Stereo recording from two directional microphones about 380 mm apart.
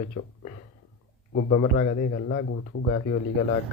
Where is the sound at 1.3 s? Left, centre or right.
Left.